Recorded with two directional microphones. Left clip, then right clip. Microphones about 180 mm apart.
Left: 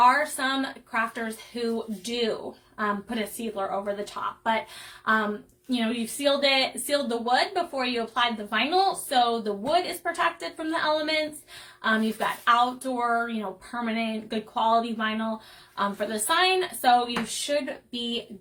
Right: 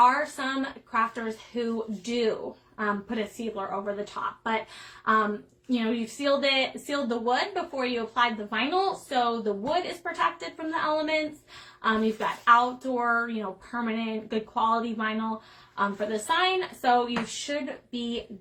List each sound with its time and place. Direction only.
0.0 s speech: 15° left (ahead or behind)
1.5 s speech: 15° left (ahead or behind)
5.7 s speech: 15° left (ahead or behind)